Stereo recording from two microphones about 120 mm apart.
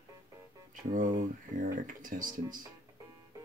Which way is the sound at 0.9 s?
90° right.